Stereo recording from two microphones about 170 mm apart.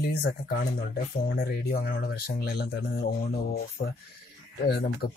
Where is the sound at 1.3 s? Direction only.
60° left (ahead or behind); by 3.0 s 80° left.